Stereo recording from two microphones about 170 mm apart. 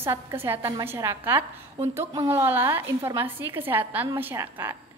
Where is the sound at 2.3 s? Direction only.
10° right (ahead or behind).